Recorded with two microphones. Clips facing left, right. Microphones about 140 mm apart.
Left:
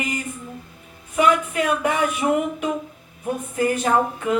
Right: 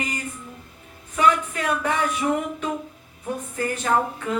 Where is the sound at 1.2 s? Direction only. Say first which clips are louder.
Left 2 dB; 15° left (ahead or behind).